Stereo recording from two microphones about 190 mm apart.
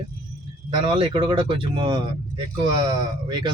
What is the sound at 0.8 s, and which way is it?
Speech, 30° right (ahead or behind).